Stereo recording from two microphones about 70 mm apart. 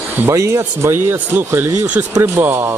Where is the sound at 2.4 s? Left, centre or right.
Right.